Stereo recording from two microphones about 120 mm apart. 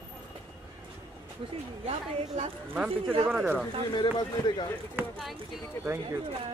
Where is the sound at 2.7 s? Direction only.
10° right (ahead or behind).